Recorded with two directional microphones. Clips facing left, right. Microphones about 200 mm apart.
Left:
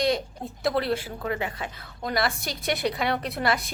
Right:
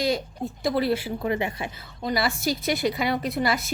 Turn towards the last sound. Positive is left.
turn(degrees=0)  # may be behind; listen again after turning